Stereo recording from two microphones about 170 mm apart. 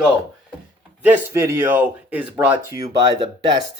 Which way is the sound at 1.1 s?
10° right (ahead or behind).